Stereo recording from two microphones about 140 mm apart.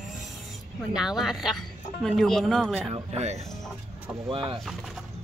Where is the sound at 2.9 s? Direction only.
50° right (ahead or behind).